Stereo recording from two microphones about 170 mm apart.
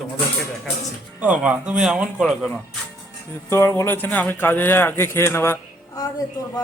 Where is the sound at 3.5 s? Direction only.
15° left (ahead or behind).